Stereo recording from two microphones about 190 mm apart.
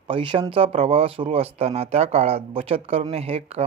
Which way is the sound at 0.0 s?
25° right (ahead or behind).